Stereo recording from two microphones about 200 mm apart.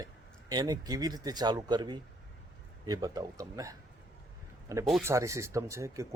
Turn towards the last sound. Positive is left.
turn(degrees=-15)  # may be behind; listen again after turning